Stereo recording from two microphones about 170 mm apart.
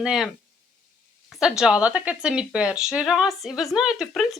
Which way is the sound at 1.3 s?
5° right (ahead or behind).